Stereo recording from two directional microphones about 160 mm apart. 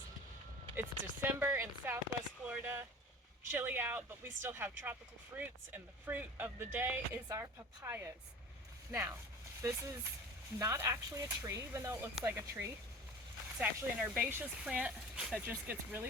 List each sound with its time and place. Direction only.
0.8 s speech: 15° right (ahead or behind)